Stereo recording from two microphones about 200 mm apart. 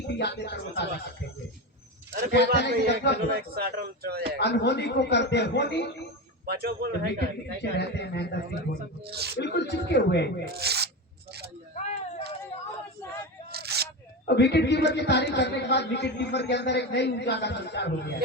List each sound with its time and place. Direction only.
0.1 s a man's voice: 55° left (ahead or behind)
2.3 s a man's voice: 55° left (ahead or behind)
3.2 s speech: 50° right (ahead or behind)
4.4 s a man's voice: 60° left (ahead or behind)
6.4 s speech: 50° right (ahead or behind)
7.6 s a man's voice: 55° left (ahead or behind)
9.0 s speech: 55° right (ahead or behind)
9.4 s a man's voice: 60° left (ahead or behind)
10.4 s speech: 50° right (ahead or behind)
11.8 s a sound: 35° left (ahead or behind)
13.5 s single-lens reflex camera: 55° right (ahead or behind)
14.3 s a man's voice: 55° left (ahead or behind)